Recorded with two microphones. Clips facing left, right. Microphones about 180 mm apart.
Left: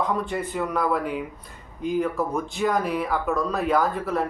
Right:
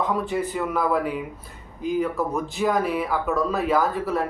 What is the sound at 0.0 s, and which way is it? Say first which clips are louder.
Speech: right 1 dB; centre (ahead or behind).